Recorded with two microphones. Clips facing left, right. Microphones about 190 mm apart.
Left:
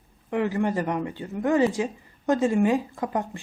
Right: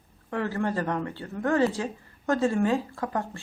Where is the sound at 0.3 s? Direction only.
15° left (ahead or behind).